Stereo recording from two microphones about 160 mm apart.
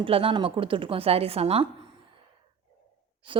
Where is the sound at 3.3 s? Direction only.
30° right (ahead or behind).